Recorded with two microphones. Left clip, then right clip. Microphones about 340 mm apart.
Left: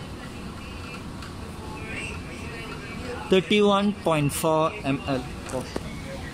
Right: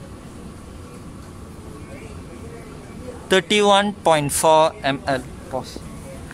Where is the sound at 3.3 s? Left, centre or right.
Right.